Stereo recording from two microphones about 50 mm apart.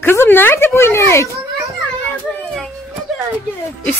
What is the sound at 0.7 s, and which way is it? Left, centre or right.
Speech, left.